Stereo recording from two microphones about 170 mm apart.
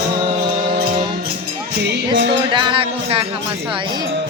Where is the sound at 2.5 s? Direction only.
30° right (ahead or behind).